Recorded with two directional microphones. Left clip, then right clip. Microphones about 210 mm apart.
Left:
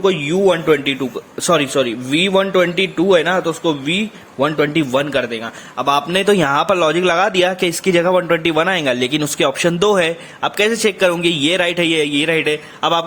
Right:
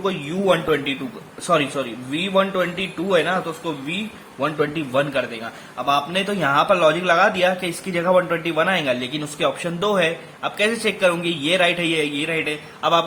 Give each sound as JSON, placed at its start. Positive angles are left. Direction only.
{"t": 0.0, "sound": "a man's voice", "side_deg": 40}